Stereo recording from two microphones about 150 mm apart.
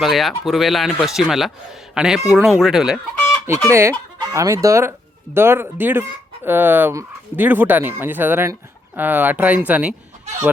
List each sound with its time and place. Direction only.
0.0 s speech: centre (ahead or behind)
3.7 s speech: 15° right (ahead or behind)